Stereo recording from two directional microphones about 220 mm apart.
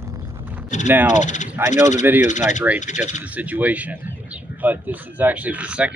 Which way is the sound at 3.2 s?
5° right (ahead or behind).